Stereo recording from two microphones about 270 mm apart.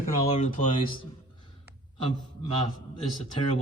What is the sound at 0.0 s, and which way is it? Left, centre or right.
Speech, left.